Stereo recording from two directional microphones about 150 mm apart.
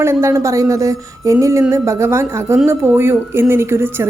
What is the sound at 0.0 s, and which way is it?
A woman's voice, 15° right (ahead or behind).